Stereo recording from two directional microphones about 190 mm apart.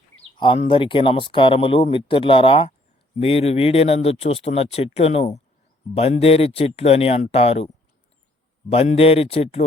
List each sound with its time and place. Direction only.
0.2 s speech: 25° left (ahead or behind)
8.7 s speech: 30° left (ahead or behind)